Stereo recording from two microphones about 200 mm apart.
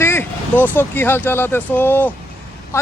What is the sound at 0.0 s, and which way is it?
A man's voice, 10° left (ahead or behind).